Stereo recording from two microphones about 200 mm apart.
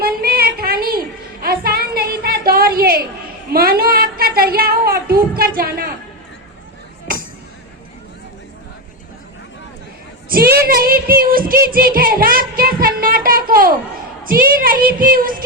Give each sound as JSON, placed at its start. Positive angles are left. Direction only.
{"t": 0.0, "sound": "music", "side_deg": -50}
{"t": 3.5, "sound": "a sound", "side_deg": -50}
{"t": 10.2, "sound": "child singing", "side_deg": -50}